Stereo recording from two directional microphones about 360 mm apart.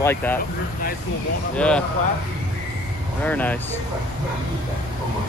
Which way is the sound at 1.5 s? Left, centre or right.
Centre.